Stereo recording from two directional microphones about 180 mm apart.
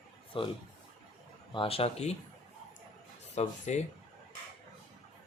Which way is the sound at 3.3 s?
40° left (ahead or behind).